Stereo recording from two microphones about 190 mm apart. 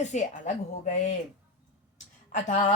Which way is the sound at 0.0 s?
40° left (ahead or behind).